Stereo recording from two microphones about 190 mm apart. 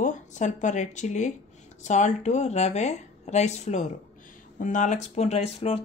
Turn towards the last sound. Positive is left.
turn(degrees=30)  # may be behind; listen again after turning